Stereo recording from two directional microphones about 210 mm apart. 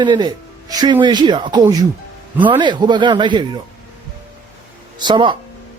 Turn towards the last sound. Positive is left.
turn(degrees=-20)  # may be behind; listen again after turning